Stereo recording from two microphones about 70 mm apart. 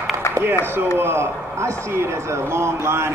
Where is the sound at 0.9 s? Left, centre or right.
Right.